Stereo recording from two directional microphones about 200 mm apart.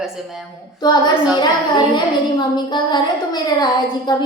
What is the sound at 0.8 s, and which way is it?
A woman's voice, 20° left (ahead or behind).